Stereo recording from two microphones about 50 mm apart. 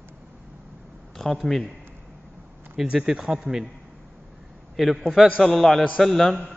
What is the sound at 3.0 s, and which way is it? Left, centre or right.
Speech, centre.